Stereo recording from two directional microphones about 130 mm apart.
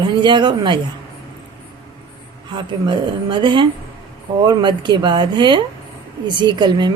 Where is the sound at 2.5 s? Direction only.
40° right (ahead or behind).